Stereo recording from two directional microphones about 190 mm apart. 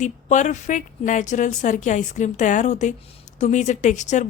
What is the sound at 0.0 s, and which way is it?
Speech, 40° left (ahead or behind).